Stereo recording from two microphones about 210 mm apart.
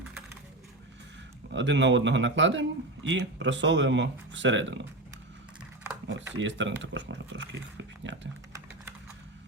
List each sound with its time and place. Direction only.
1.5 s speech: 60° right (ahead or behind)
6.3 s speech: 60° right (ahead or behind)